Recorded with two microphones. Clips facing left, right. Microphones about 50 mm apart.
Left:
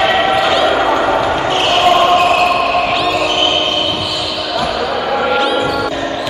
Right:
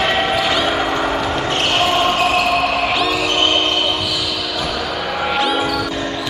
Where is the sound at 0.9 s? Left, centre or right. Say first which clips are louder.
Left 6 dB; centre.